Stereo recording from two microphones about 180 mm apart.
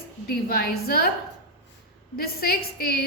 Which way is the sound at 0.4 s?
60° left (ahead or behind).